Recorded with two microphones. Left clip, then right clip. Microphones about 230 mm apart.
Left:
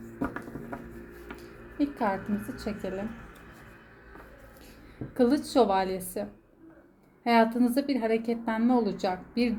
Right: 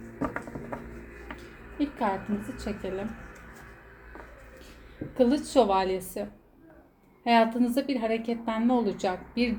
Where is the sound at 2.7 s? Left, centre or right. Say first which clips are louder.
Even; left.